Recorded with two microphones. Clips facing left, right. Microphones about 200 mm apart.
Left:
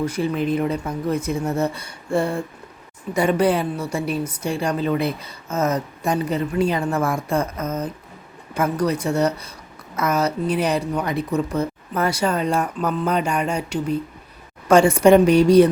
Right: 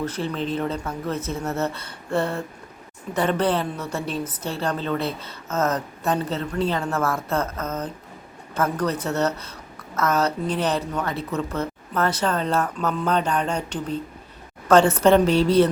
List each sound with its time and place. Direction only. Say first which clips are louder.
0.0 s a woman's voice: left 5 dB; 10° left (ahead or behind)